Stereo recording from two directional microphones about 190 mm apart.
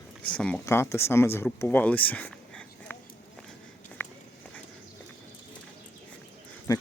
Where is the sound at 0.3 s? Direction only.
5° left (ahead or behind).